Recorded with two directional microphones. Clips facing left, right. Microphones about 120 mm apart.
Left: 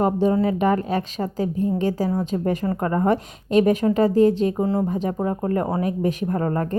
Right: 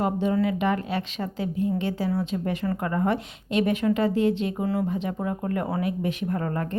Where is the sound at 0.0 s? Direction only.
35° left (ahead or behind).